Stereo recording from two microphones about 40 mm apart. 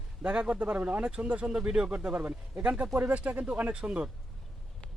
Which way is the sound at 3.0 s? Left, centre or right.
Right.